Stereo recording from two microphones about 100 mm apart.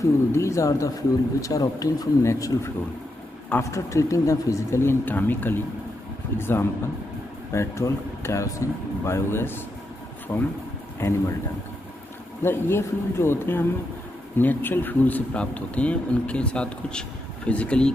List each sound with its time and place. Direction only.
0.0 s speech: 30° left (ahead or behind)
12.4 s speech: 25° left (ahead or behind)